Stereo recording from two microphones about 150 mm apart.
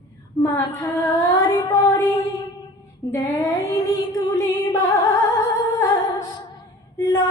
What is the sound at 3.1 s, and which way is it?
Female singing, 15° left (ahead or behind).